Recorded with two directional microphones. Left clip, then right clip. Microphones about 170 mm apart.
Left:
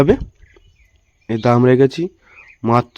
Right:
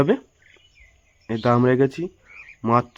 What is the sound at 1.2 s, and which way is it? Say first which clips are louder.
Speech: left 5 dB; 30° left (ahead or behind).